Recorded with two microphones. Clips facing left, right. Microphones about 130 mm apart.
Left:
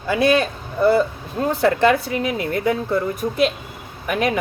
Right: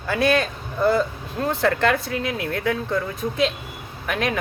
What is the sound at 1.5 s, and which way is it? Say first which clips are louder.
Speech: left 4 dB; 10° left (ahead or behind).